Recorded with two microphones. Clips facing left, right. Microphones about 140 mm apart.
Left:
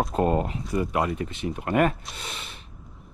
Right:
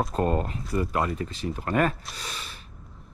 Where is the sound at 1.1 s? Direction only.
35° right (ahead or behind).